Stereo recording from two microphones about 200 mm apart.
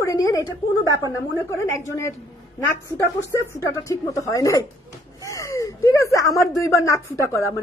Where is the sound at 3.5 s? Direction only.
15° left (ahead or behind).